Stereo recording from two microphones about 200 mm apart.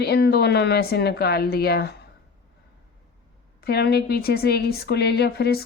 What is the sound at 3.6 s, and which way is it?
A woman's voice, 55° left (ahead or behind).